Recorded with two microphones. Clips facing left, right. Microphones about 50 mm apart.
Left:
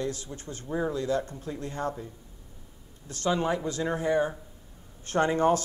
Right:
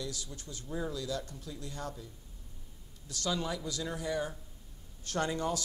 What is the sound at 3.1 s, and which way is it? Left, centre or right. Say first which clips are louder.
Speech: left 8 dB; left.